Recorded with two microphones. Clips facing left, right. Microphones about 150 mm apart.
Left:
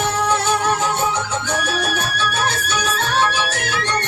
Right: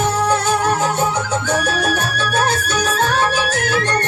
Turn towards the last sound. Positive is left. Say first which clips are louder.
# right 4 dB
turn(degrees=-45)  # may be behind; listen again after turning